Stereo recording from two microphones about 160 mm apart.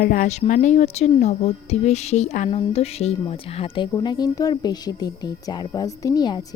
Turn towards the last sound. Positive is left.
turn(degrees=25)  # may be behind; listen again after turning